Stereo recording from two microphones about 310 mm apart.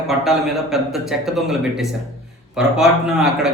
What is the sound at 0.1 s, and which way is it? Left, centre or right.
A man's voice, centre.